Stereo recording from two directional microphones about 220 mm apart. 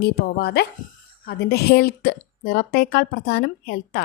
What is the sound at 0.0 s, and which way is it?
Speech, 45° left (ahead or behind).